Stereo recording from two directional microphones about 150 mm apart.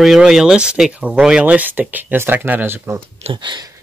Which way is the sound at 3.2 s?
30° right (ahead or behind).